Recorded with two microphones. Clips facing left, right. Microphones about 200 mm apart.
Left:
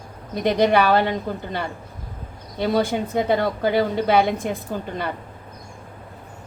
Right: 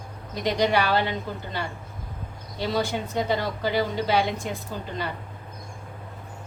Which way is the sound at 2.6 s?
55° left (ahead or behind).